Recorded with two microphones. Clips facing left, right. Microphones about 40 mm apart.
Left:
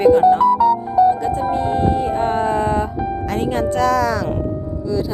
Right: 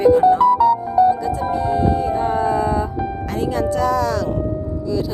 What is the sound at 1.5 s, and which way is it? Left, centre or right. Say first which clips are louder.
Music: right 1 dB; left.